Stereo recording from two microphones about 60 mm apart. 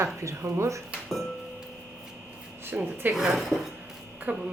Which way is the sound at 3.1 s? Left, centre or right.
Centre.